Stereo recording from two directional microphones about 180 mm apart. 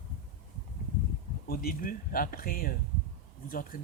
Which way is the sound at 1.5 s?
55° left (ahead or behind).